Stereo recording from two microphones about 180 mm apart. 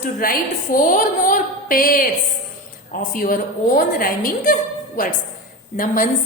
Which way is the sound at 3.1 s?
50° left (ahead or behind).